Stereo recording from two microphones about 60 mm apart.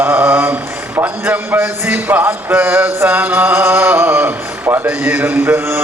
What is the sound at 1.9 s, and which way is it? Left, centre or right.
A man's voice, right.